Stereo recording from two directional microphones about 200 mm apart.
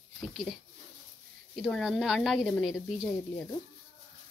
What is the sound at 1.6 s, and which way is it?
Speech, centre (ahead or behind).